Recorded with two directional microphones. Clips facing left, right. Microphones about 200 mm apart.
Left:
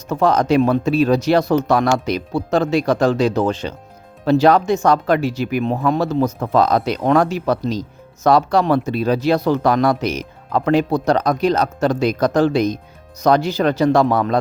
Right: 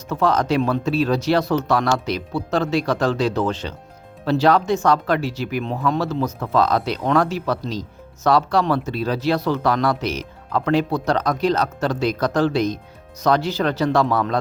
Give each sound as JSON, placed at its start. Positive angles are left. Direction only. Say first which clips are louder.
{"t": 0.1, "sound": "speech", "louder": "left 4 dB", "side_deg": 15}